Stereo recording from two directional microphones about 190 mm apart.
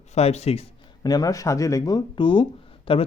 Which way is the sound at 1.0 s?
20° left (ahead or behind).